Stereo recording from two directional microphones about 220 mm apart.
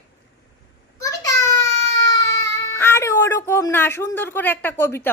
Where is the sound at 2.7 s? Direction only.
10° left (ahead or behind).